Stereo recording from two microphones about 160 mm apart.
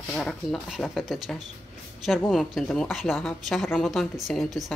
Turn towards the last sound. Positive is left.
turn(degrees=0)  # may be behind; listen again after turning